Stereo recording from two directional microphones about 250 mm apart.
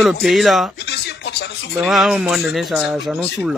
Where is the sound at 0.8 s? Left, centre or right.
Left.